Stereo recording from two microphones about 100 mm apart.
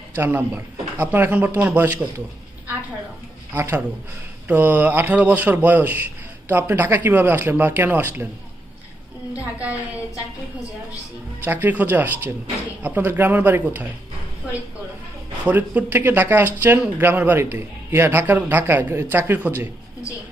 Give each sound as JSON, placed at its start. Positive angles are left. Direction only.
{"t": 0.2, "sound": "speech", "side_deg": -20}
{"t": 3.5, "sound": "speech", "side_deg": -25}
{"t": 9.4, "sound": "a woman's voice", "side_deg": -15}
{"t": 11.4, "sound": "speech", "side_deg": -20}
{"t": 15.4, "sound": "speech", "side_deg": -15}